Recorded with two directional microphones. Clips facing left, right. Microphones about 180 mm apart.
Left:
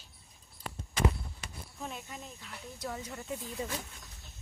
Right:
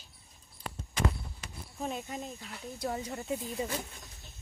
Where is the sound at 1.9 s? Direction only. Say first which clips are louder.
Right 7 dB; 25° right (ahead or behind).